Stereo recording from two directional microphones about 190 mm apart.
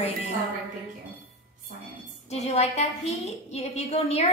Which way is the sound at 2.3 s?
35° left (ahead or behind).